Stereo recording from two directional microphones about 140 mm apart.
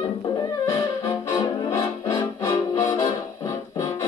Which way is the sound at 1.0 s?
25° left (ahead or behind).